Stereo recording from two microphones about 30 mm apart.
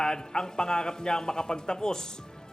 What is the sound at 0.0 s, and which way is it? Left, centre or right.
A woman's voice, left.